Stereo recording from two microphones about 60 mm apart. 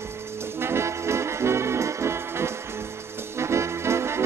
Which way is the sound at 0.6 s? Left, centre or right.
Right.